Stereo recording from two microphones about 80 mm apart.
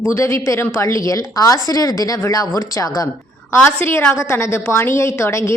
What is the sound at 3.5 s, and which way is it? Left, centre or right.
A woman's voice, left.